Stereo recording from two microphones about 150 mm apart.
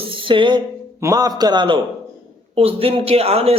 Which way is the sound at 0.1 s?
35° right (ahead or behind).